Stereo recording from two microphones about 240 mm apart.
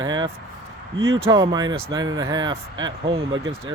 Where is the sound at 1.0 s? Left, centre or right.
Right.